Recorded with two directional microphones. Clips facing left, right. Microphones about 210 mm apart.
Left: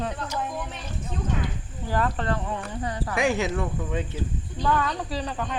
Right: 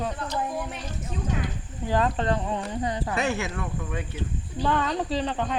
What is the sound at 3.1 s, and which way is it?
Speech, 15° left (ahead or behind).